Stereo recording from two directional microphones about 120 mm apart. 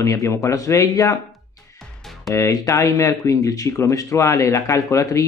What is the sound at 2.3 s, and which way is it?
Speech, 25° left (ahead or behind).